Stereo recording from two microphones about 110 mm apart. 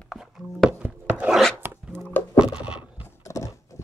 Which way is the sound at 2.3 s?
5° right (ahead or behind).